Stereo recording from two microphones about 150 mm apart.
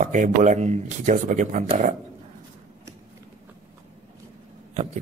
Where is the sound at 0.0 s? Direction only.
60° right (ahead or behind).